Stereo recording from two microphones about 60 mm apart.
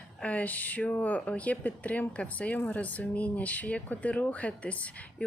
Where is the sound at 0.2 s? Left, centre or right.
Left.